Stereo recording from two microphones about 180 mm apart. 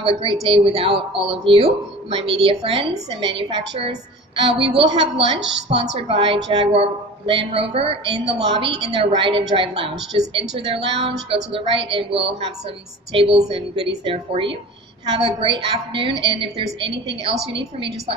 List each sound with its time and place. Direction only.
0.0 s a woman's voice: 30° right (ahead or behind)